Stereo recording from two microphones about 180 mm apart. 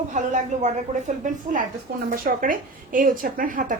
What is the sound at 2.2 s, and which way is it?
Speech, 50° right (ahead or behind).